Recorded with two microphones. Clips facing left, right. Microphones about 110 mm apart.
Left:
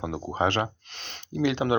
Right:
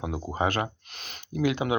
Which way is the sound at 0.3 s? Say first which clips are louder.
Left 2 dB; 25° left (ahead or behind).